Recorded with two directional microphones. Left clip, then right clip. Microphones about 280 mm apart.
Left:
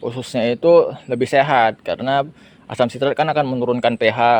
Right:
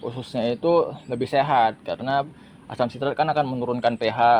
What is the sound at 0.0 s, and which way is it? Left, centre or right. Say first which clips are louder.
A man's voice: left 6 dB; left.